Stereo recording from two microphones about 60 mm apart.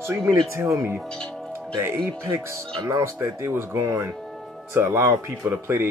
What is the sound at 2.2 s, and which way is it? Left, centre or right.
Speech, right.